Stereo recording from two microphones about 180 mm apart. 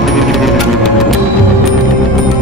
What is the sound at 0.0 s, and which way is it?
Music, centre (ahead or behind).